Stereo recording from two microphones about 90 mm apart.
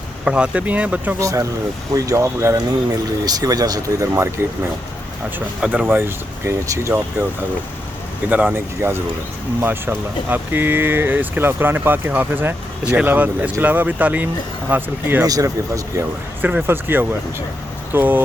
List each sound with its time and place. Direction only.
0.3 s speech: 10° right (ahead or behind)
1.2 s speech: 40° right (ahead or behind)
3.2 s speech: 45° right (ahead or behind)
5.5 s speech: 15° right (ahead or behind)
8.3 s speech: 15° right (ahead or behind)
8.5 s speech: 25° right (ahead or behind)
15.2 s speech: 40° right (ahead or behind)
16.6 s speech: 25° right (ahead or behind)